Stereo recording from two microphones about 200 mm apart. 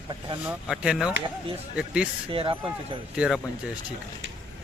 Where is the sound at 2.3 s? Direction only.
25° right (ahead or behind).